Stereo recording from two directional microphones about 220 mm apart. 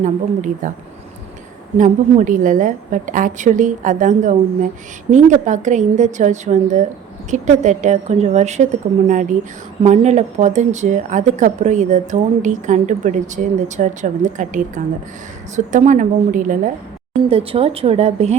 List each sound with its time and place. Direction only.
0.0 s speech: 35° right (ahead or behind)
1.8 s a woman's voice: 35° right (ahead or behind)